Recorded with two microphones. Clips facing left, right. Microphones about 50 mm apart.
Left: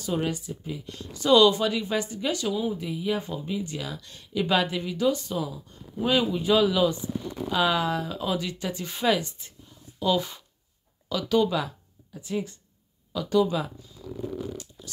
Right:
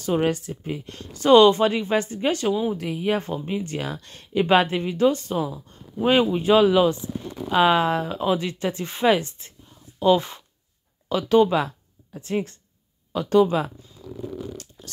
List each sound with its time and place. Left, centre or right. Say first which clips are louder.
0.0 s speech: right 6 dB; right
2.7 s speech: right 4 dB; right